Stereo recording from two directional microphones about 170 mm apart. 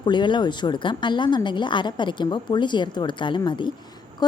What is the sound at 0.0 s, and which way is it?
A woman's voice, 25° left (ahead or behind).